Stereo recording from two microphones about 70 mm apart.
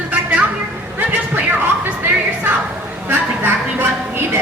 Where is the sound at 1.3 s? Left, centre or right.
Right.